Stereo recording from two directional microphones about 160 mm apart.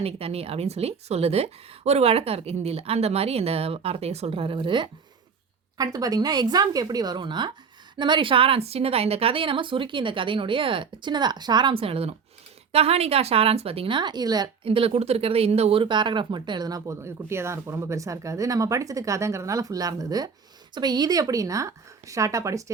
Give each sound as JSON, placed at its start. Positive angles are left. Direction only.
{"t": 0.0, "sound": "a woman's voice", "side_deg": -40}